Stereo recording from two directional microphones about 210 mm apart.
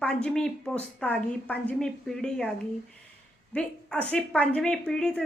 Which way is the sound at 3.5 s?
5° left (ahead or behind).